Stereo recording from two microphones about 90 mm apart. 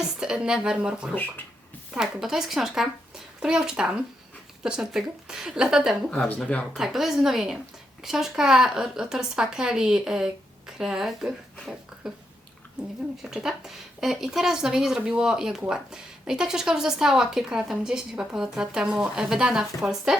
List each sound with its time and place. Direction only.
0.2 s speech: 10° right (ahead or behind)
6.4 s speech: 15° left (ahead or behind)
6.7 s speech: 5° right (ahead or behind)
12.8 s speech: 5° right (ahead or behind)